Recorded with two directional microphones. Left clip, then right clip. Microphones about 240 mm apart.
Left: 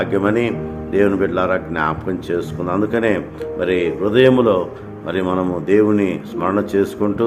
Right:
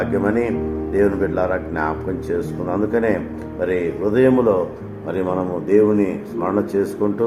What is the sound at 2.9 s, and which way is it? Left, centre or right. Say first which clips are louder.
Speech: left 1 dB; left.